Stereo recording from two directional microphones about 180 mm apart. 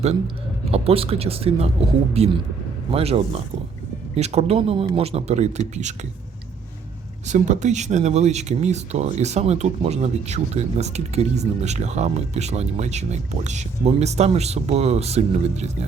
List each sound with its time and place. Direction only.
0.7 s speech: 35° right (ahead or behind)
7.3 s speech: 40° right (ahead or behind)